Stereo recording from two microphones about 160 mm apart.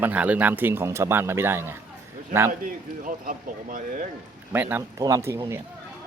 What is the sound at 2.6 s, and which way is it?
Speech, 60° right (ahead or behind).